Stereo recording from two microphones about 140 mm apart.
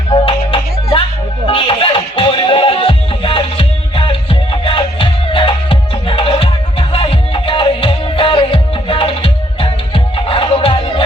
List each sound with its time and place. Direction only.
0.1 s music: 40° left (ahead or behind)